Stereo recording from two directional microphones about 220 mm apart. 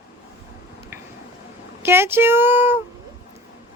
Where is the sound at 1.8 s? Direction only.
10° right (ahead or behind).